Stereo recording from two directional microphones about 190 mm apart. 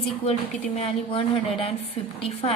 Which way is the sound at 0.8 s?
30° left (ahead or behind).